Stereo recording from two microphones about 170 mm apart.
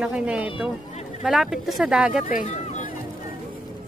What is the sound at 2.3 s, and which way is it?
Speech, 45° left (ahead or behind).